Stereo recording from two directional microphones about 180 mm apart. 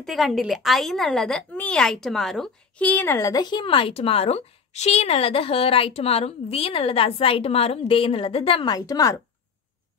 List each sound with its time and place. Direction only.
0.0 s a woman's voice: centre (ahead or behind); by 9.2 s 20° left (ahead or behind)